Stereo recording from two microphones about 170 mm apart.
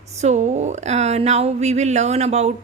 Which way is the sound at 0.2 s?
40° right (ahead or behind).